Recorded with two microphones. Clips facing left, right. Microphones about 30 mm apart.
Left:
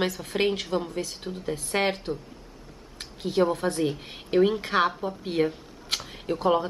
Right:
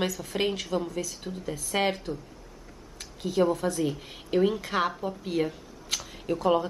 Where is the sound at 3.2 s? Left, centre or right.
Left.